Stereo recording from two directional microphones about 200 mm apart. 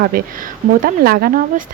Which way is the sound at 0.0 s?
45° right (ahead or behind).